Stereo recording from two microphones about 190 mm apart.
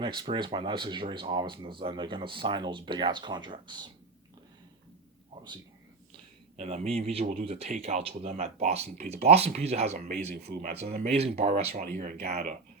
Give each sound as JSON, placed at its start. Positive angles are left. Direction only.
{"t": 0.0, "sound": "speech", "side_deg": -25}
{"t": 6.6, "sound": "speech", "side_deg": -35}
{"t": 10.5, "sound": "speech", "side_deg": -55}
{"t": 11.0, "sound": "speech", "side_deg": -35}